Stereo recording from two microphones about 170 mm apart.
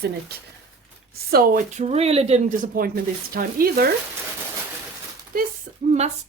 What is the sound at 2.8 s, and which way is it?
Speech, 55° right (ahead or behind).